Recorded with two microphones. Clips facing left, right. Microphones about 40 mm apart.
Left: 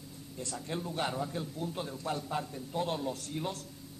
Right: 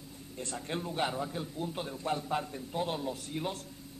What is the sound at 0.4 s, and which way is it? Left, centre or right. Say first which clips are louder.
Speech: right 1 dB; right.